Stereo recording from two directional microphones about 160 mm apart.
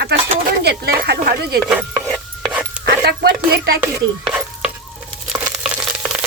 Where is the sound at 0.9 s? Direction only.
80° right.